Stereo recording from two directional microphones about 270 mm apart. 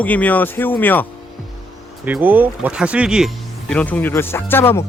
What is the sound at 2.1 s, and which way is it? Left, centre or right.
Speech, centre.